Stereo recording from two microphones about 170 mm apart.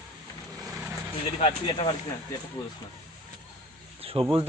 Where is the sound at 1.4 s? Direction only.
35° left (ahead or behind).